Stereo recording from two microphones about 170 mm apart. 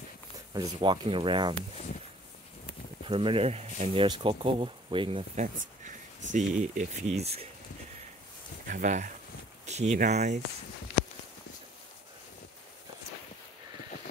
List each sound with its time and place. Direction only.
0.5 s speech: 25° right (ahead or behind)
3.1 s speech: 30° right (ahead or behind)
5.3 s speech: 45° right (ahead or behind)
8.6 s speech: 50° right (ahead or behind)